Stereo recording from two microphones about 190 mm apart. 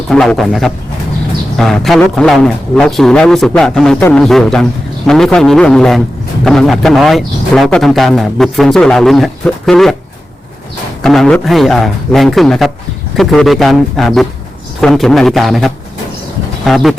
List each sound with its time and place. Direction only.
0.1 s a man's voice: 5° left (ahead or behind)
11.0 s a man's voice: centre (ahead or behind)